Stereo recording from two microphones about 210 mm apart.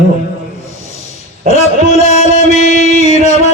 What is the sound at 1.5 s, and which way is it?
Music, 30° left (ahead or behind).